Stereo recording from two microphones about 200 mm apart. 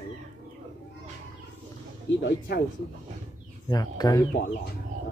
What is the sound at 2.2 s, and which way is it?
Speech, 55° left (ahead or behind).